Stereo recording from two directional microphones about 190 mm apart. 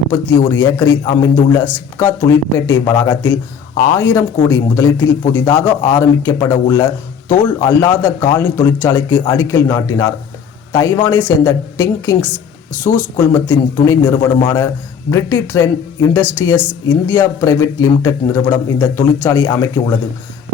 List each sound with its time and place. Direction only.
0.1 s a man's voice: 15° left (ahead or behind)